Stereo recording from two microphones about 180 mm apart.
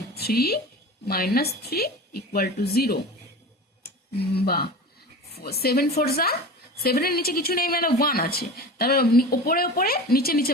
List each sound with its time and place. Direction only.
0.1 s a woman's voice: 60° left (ahead or behind)
4.4 s speech: 60° left (ahead or behind)